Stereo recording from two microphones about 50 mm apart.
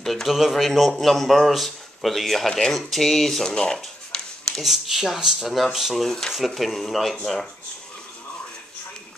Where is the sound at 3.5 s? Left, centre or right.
Centre.